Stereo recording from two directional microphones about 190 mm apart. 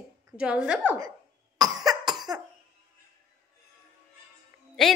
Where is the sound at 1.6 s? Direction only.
20° right (ahead or behind).